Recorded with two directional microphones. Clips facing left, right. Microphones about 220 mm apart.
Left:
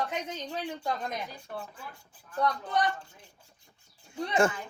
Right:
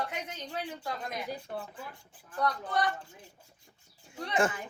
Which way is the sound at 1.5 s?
25° right (ahead or behind).